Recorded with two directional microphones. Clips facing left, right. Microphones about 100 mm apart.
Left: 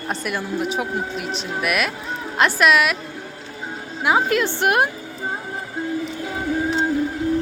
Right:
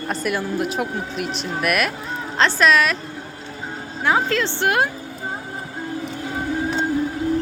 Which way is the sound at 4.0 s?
15° left (ahead or behind).